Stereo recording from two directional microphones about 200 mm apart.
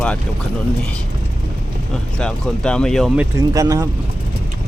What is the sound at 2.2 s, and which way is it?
Speech, 5° left (ahead or behind).